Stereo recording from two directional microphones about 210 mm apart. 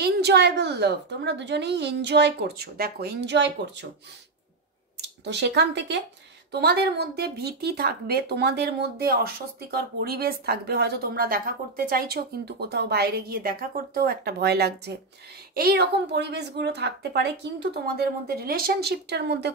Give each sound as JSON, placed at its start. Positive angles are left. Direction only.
{"t": 0.0, "sound": "a woman's voice", "side_deg": -50}
{"t": 5.0, "sound": "a woman's voice", "side_deg": -55}